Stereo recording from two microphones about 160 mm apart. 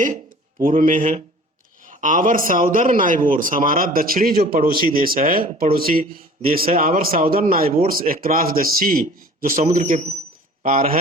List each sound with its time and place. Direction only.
0.6 s a man's voice: 60° right (ahead or behind)